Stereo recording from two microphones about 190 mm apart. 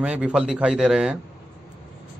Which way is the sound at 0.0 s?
5° right (ahead or behind).